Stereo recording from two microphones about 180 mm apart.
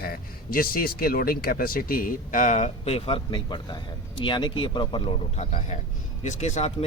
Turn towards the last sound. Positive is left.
turn(degrees=40)  # may be behind; listen again after turning